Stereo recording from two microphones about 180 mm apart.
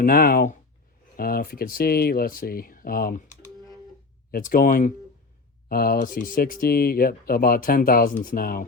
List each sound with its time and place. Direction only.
0.0 s speech: 55° left (ahead or behind)
4.3 s speech: 50° left (ahead or behind)